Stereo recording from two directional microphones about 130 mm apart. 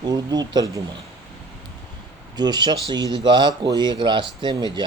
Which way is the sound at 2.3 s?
35° right (ahead or behind).